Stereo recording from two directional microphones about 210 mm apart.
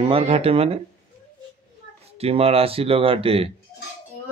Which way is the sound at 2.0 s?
30° right (ahead or behind).